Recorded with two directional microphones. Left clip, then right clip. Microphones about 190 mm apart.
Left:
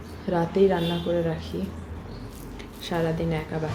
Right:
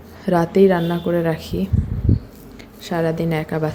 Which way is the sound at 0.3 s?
40° right (ahead or behind).